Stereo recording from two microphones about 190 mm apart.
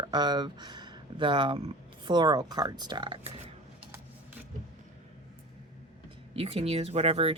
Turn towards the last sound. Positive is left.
turn(degrees=-30)  # may be behind; listen again after turning